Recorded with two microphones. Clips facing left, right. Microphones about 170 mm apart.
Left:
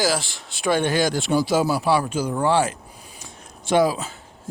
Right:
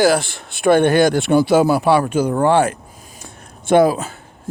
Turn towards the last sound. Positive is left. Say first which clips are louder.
# right 6 dB
turn(degrees=-55)  # may be behind; listen again after turning